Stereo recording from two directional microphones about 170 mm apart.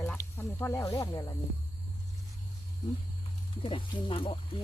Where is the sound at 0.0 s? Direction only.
15° left (ahead or behind).